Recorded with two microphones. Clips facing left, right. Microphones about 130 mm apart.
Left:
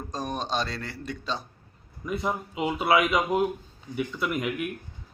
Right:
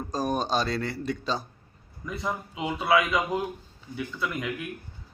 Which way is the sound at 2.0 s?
15° left (ahead or behind).